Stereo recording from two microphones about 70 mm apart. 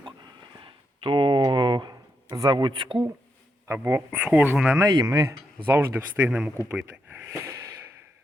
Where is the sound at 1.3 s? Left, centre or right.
Right.